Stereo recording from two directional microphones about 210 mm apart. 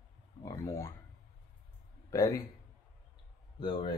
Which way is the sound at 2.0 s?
15° left (ahead or behind).